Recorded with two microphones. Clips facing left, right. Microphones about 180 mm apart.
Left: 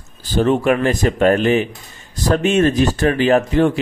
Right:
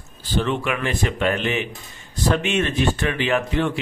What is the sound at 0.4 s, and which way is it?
Speech, 40° left (ahead or behind).